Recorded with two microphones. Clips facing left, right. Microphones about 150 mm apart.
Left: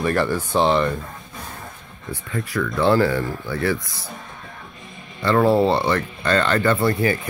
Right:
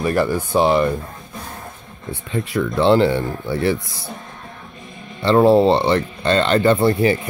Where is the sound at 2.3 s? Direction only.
25° right (ahead or behind).